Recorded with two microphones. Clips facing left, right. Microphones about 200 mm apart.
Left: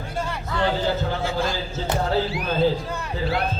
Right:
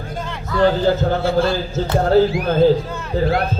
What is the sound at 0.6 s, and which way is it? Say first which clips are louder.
A man's voice: right 8 dB; 50° right (ahead or behind).